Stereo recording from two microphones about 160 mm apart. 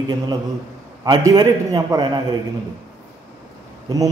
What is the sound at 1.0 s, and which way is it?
A man's voice, 25° right (ahead or behind).